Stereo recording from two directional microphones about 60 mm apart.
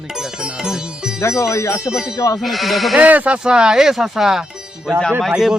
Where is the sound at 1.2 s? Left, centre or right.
Left.